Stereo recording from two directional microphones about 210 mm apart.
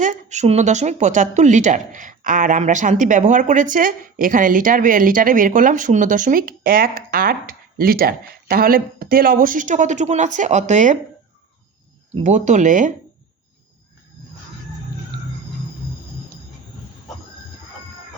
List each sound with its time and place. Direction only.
0.0 s a woman's voice: 35° right (ahead or behind)
12.2 s a woman's voice: 35° right (ahead or behind)